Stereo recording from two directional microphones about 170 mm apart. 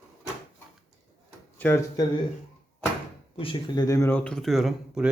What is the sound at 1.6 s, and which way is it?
Speech, 15° left (ahead or behind).